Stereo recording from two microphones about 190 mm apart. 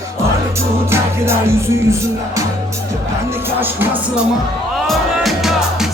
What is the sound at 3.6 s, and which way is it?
Music, 10° right (ahead or behind).